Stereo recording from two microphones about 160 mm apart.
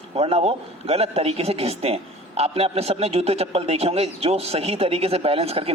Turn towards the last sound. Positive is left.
turn(degrees=-40)  # may be behind; listen again after turning